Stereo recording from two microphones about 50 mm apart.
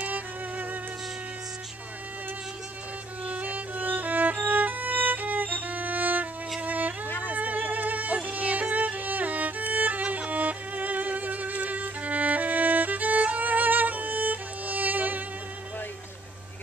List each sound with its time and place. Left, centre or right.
0.0 s music: right
3.3 s music: right
8.3 s violin: right